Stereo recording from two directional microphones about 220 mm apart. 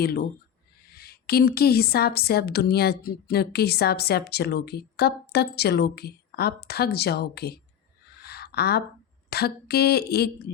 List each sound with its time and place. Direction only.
0.0 s a woman's voice: 45° left (ahead or behind)
8.2 s a sound: 45° left (ahead or behind)
9.3 s a woman's voice: 45° left (ahead or behind)